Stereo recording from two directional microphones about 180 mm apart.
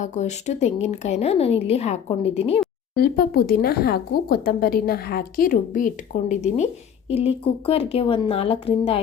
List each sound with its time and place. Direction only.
0.0 s speech: 40° left (ahead or behind)
2.9 s speech: 60° left (ahead or behind); by 9.0 s 30° left (ahead or behind)